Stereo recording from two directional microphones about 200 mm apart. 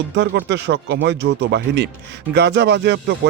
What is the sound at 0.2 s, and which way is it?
Speech, 60° right (ahead or behind).